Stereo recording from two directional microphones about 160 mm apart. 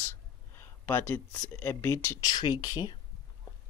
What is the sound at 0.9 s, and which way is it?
Speech, 15° left (ahead or behind).